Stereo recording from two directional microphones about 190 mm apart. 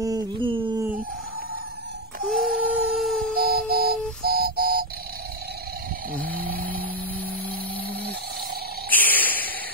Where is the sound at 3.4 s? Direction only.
55° right (ahead or behind).